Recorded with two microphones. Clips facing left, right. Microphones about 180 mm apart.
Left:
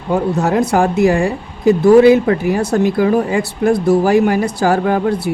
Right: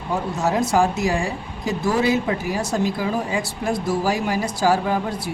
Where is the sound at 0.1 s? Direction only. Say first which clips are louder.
Left 7 dB; 60° left (ahead or behind).